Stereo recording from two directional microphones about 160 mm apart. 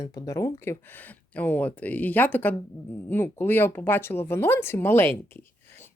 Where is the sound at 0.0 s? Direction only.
20° left (ahead or behind).